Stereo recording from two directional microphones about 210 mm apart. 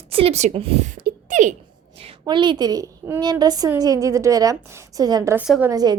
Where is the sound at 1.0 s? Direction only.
35° right (ahead or behind).